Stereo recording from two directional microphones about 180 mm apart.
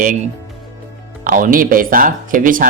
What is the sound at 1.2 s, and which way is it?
Speech, 50° right (ahead or behind).